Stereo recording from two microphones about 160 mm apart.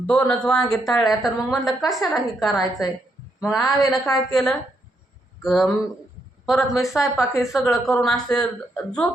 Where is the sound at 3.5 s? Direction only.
20° left (ahead or behind).